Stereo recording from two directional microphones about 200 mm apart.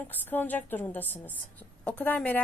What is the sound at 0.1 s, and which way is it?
A woman's voice, 10° left (ahead or behind).